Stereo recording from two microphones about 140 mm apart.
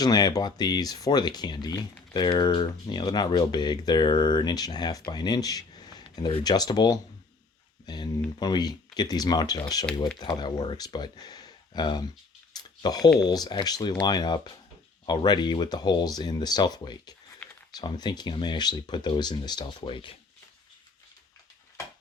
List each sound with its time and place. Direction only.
0.0 s speech: 30° left (ahead or behind)
12.5 s a sound: 30° left (ahead or behind)
13.1 s speech: 30° left (ahead or behind)